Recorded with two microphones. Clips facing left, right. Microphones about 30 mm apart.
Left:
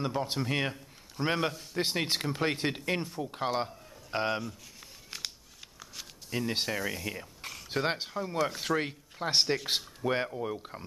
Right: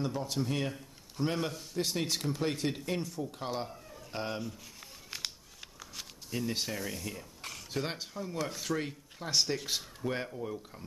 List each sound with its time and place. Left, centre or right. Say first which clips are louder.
0.0 s speech: left 2 dB; left
1.5 s speech: even; centre
1.8 s speech: left 3 dB; left
4.4 s a sound: left 1 dB; centre
6.3 s speech: left 3 dB; left
6.7 s speech: left 5 dB; centre
7.7 s speech: left 6 dB; left